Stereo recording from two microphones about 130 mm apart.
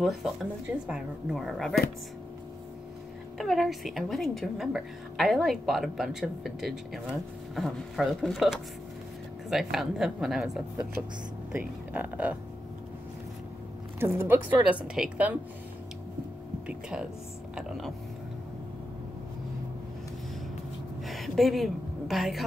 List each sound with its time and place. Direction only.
0.0 s a woman's voice: centre (ahead or behind)
3.3 s a woman's voice: centre (ahead or behind)
13.9 s speech: 20° right (ahead or behind)
14.6 s speech: 10° right (ahead or behind)
16.6 s a woman's voice: 5° right (ahead or behind)
21.1 s a woman's voice: centre (ahead or behind)